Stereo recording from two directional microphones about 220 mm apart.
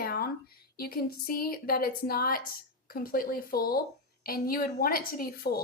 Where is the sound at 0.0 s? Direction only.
45° left (ahead or behind).